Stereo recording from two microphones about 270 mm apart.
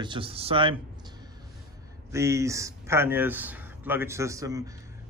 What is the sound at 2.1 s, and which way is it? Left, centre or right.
Speech, centre.